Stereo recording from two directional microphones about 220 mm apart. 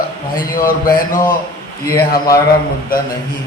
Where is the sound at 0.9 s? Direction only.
40° left (ahead or behind).